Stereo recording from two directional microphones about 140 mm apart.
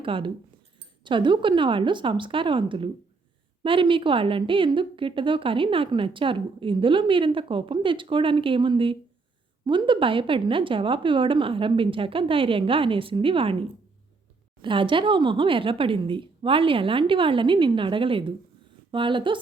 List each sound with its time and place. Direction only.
0.0 s a woman's voice: 40° right (ahead or behind)